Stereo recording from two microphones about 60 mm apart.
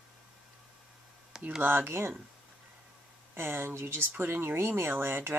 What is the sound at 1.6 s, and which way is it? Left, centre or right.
Speech, right.